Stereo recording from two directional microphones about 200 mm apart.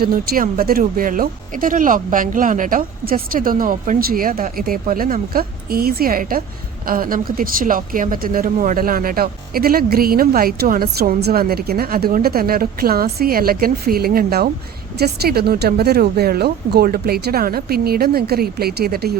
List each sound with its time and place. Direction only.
0.0 s speech: 45° right (ahead or behind)